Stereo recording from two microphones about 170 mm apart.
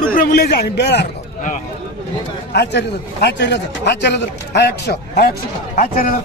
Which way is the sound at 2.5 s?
80° left.